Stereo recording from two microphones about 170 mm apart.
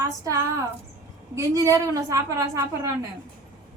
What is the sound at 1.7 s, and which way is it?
A woman's voice, 20° right (ahead or behind).